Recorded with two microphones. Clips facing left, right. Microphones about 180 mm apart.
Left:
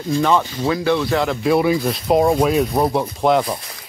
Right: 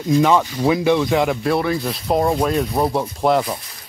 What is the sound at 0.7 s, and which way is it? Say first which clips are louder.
Speech: right 2 dB; 15° right (ahead or behind).